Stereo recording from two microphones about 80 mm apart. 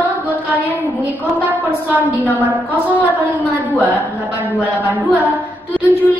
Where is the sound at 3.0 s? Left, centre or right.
Centre.